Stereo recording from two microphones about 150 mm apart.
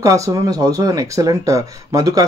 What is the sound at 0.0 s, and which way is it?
Speech, 20° right (ahead or behind).